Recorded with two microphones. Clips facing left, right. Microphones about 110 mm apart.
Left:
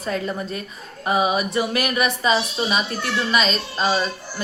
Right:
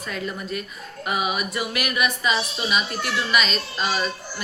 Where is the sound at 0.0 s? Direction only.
35° left (ahead or behind).